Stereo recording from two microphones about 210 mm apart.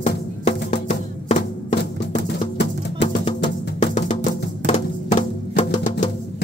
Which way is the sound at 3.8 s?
35° left (ahead or behind).